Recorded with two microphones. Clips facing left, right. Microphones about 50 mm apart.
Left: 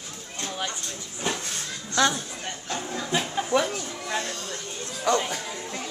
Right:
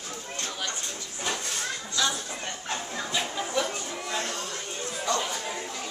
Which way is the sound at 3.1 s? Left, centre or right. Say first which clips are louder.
Left 4 dB; left.